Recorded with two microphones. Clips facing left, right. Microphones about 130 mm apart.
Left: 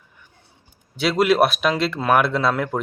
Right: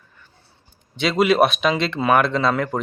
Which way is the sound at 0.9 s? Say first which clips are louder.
Even; centre (ahead or behind).